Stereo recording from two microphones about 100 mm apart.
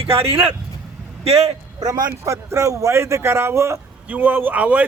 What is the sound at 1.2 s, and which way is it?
Speech, 90° right.